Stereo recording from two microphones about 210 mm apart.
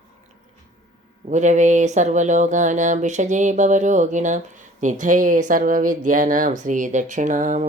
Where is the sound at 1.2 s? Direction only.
35° right (ahead or behind).